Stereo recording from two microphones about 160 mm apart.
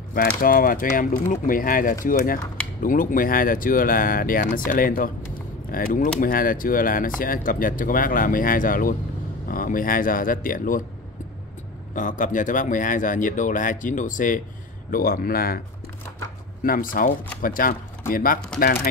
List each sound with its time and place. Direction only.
0.1 s speech: 65° left (ahead or behind)
11.9 s a man's voice: 55° left (ahead or behind)
16.6 s speech: 60° left (ahead or behind)